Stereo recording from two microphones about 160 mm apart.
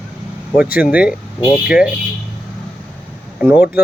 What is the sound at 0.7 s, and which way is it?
Speech, 10° right (ahead or behind).